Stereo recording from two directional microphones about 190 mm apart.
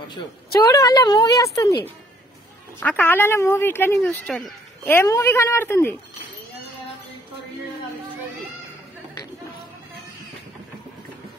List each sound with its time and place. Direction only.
0.7 s speech: 20° left (ahead or behind)
2.8 s speech: 10° left (ahead or behind)
4.8 s speech: 15° left (ahead or behind)